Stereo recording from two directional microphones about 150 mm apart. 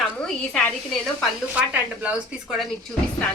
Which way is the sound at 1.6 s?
10° right (ahead or behind).